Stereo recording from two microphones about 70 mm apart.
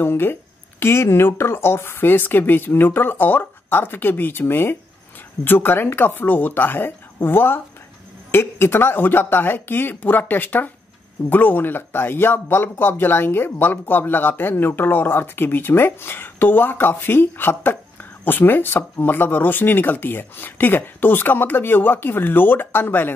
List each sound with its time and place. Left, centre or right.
0.0 s speech: left